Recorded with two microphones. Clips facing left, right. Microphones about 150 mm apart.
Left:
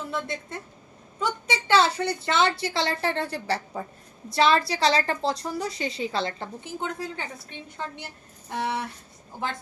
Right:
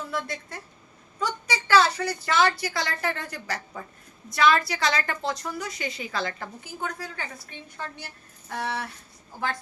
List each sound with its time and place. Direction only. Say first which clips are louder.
0.0 s a woman's voice: left 1 dB; 25° left (ahead or behind)